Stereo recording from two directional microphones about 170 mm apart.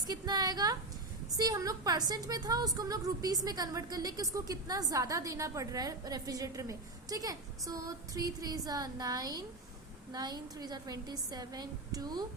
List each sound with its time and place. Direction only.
0.1 s a woman's voice: 25° right (ahead or behind)